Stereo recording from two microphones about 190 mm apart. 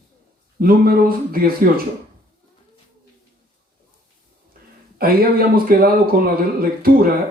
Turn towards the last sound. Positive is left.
turn(degrees=-50)  # may be behind; listen again after turning